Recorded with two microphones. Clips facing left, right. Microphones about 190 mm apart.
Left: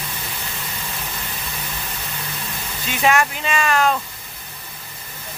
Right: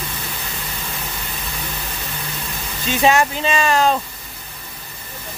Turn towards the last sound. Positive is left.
turn(degrees=-30)  # may be behind; listen again after turning